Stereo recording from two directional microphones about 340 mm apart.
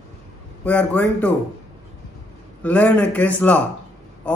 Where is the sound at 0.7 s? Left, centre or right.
Centre.